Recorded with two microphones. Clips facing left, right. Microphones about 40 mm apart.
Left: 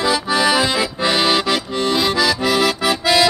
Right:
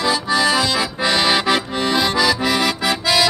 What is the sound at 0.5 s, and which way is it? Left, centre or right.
Accordion, centre.